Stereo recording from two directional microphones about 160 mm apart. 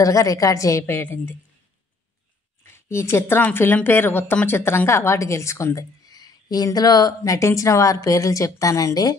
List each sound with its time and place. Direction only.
0.0 s a woman's voice: 20° left (ahead or behind)
2.6 s speech: 15° left (ahead or behind)